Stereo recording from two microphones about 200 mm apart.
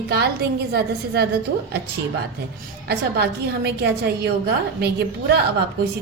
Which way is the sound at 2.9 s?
55° right (ahead or behind).